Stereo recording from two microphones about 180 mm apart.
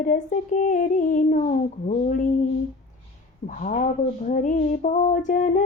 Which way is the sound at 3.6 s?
45° left (ahead or behind).